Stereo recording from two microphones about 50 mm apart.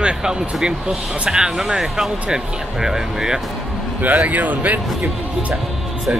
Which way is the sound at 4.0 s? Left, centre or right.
Right.